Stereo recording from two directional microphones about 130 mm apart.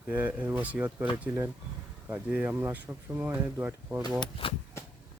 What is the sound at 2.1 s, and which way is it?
Speech, 10° right (ahead or behind).